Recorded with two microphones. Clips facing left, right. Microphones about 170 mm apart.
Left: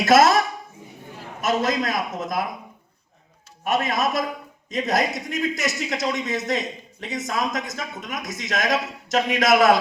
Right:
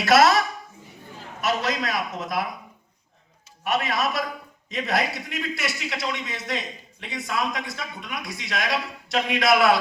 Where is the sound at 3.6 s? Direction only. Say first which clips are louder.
Left 2 dB; 45° left (ahead or behind).